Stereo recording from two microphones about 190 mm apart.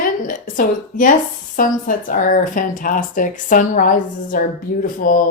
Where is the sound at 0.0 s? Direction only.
45° left (ahead or behind).